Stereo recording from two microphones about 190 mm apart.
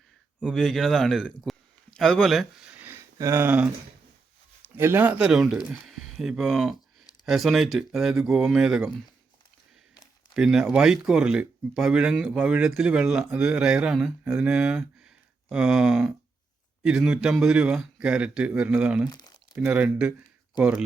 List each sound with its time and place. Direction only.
0.3 s a man's voice: centre (ahead or behind)
4.7 s speech: 10° right (ahead or behind)
10.3 s speech: 5° right (ahead or behind)
19.0 s speech: 20° left (ahead or behind)
19.5 s speech: 5° right (ahead or behind)